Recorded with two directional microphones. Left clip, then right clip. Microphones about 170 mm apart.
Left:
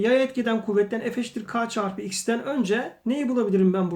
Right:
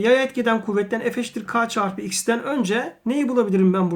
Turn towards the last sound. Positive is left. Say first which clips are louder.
# right 3 dB
turn(degrees=-35)  # may be behind; listen again after turning